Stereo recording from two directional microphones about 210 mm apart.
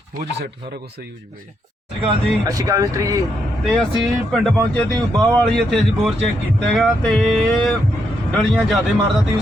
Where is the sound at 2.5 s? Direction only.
15° right (ahead or behind).